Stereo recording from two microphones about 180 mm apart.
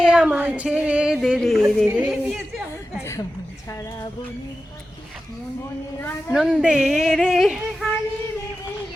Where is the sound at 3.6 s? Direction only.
15° left (ahead or behind).